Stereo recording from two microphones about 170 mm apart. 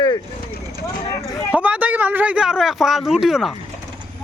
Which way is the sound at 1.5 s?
10° right (ahead or behind).